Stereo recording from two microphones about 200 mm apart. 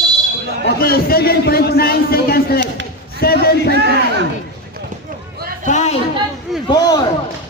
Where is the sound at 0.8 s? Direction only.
50° left (ahead or behind).